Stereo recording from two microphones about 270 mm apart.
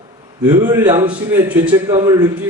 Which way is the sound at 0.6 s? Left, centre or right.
Centre.